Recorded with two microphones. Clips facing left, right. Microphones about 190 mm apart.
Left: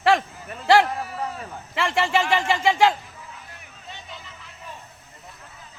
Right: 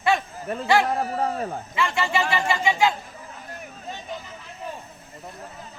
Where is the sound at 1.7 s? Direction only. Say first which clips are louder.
Left 3 dB; 90° left.